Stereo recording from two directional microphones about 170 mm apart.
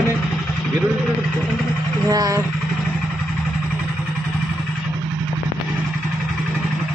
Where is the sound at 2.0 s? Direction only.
20° right (ahead or behind).